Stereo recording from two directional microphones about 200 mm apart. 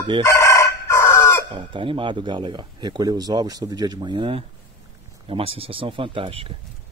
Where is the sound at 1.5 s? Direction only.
25° right (ahead or behind).